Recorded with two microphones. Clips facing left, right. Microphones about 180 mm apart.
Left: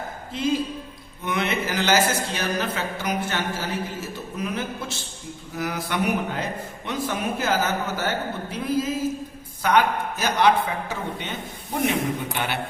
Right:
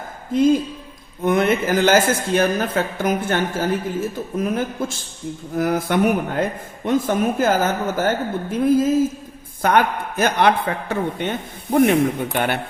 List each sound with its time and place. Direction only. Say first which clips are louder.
0.3 s a man's voice: right 8 dB; 50° right (ahead or behind)